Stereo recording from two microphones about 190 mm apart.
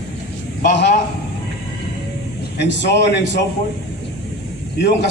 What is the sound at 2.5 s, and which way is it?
Speech, 65° left (ahead or behind).